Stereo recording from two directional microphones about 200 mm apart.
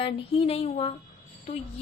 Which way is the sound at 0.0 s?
30° left (ahead or behind).